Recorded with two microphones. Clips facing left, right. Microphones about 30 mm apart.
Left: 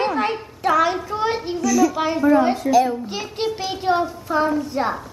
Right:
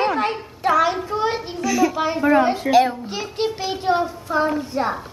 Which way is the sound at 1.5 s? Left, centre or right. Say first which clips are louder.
Left 2 dB; right.